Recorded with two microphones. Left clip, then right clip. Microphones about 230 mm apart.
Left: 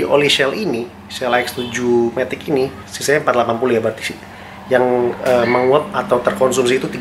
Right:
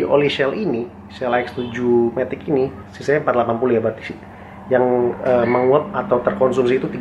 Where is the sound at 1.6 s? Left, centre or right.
Right.